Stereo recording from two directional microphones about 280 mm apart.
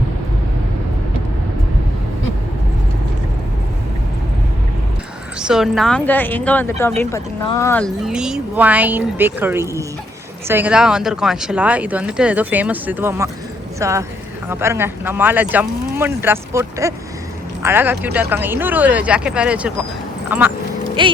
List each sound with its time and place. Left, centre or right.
5.4 s speech: centre
21.0 s speech: centre